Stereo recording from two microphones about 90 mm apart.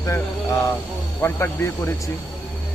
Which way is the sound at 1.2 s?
25° left (ahead or behind).